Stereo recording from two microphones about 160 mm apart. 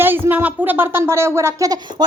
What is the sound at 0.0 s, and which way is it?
A woman's voice, 15° right (ahead or behind).